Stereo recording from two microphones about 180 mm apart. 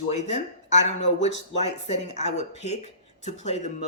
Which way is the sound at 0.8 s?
90° left.